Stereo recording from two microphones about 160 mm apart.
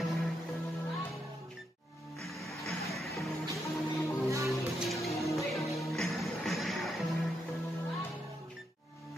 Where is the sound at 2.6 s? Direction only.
Centre (ahead or behind).